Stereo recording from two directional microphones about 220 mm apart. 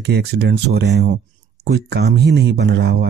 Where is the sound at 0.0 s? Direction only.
50° right (ahead or behind).